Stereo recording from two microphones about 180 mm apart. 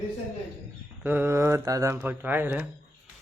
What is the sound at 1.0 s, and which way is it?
Speech, 10° right (ahead or behind).